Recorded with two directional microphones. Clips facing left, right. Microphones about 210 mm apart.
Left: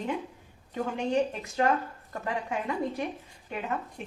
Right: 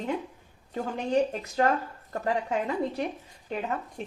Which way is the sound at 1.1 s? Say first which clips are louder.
Right 6 dB; 40° right (ahead or behind).